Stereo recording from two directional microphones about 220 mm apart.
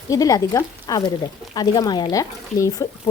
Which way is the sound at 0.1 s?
15° left (ahead or behind).